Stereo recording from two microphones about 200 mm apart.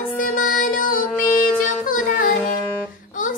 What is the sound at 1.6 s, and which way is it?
Child singing, 40° left (ahead or behind).